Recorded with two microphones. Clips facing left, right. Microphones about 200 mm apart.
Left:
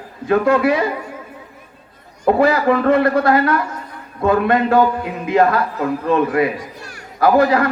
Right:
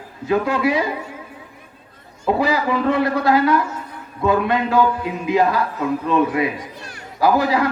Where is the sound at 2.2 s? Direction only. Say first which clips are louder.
Left 5 dB; 50° left (ahead or behind).